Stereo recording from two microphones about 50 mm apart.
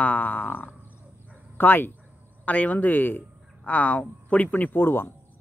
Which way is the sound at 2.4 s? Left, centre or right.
Left.